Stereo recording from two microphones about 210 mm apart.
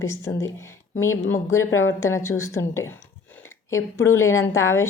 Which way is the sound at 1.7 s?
75° left (ahead or behind).